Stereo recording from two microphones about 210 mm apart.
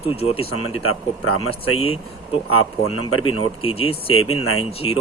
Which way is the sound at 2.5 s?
90° left.